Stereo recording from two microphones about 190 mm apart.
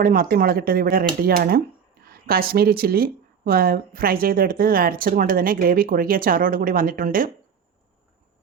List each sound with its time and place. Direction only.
0.0 s speech: 45° right (ahead or behind)